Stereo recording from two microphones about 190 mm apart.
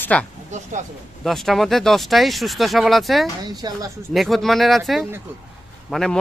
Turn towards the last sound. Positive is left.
turn(degrees=0)  # may be behind; listen again after turning